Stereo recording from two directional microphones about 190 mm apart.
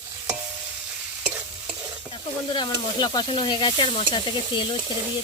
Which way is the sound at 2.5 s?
25° left (ahead or behind).